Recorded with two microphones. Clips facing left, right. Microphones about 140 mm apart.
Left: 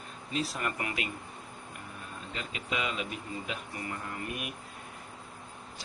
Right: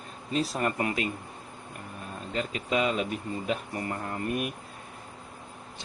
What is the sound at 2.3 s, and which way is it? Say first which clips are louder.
Speech: right 8 dB; 40° right (ahead or behind).